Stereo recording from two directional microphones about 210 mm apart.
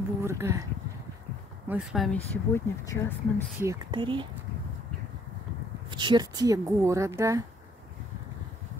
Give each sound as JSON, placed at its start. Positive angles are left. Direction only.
{"t": 0.2, "sound": "speech", "side_deg": -10}
{"t": 1.7, "sound": "speech", "side_deg": 0}
{"t": 2.3, "sound": "speech", "side_deg": 15}
{"t": 3.6, "sound": "speech", "side_deg": -25}
{"t": 5.9, "sound": "speech", "side_deg": -20}